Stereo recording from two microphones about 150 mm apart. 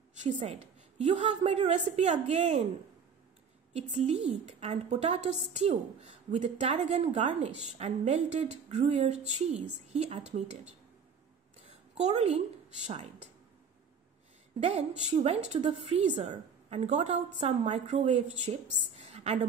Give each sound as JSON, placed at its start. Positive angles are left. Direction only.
{"t": 0.2, "sound": "a woman's voice", "side_deg": -50}
{"t": 1.1, "sound": "a woman's voice", "side_deg": -35}
{"t": 2.0, "sound": "a woman's voice", "side_deg": -50}
{"t": 3.7, "sound": "a woman's voice", "side_deg": -45}
{"t": 12.0, "sound": "a woman's voice", "side_deg": -45}
{"t": 14.6, "sound": "a woman's voice", "side_deg": -45}
{"t": 18.0, "sound": "a woman's voice", "side_deg": -35}
{"t": 19.0, "sound": "a sound", "side_deg": -45}